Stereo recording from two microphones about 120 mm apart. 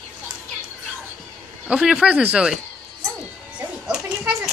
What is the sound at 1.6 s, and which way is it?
Speech, 5° right (ahead or behind).